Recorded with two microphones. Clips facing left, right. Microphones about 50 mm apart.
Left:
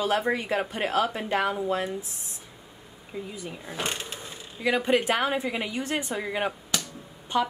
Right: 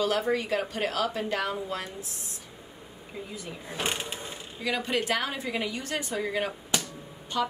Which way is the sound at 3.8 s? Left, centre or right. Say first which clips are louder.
Right 1 dB; centre.